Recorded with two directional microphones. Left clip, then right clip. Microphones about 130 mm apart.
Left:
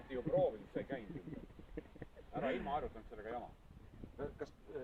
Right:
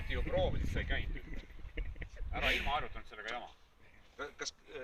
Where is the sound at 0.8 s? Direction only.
10° left (ahead or behind).